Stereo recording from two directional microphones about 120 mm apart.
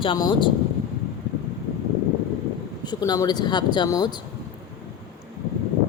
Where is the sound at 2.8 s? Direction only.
35° left (ahead or behind).